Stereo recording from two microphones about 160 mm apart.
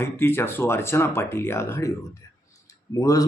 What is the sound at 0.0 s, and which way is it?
A man's voice, 15° left (ahead or behind).